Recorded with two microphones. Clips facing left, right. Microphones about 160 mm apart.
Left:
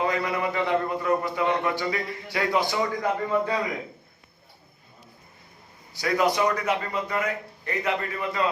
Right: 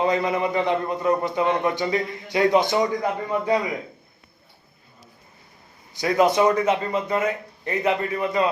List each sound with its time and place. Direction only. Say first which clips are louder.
0.0 s a man's voice: right 4 dB; 20° right (ahead or behind)
5.9 s a man's voice: right 4 dB; 20° right (ahead or behind)